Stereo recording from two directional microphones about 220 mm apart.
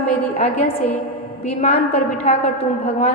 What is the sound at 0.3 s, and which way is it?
A woman's voice, 30° left (ahead or behind).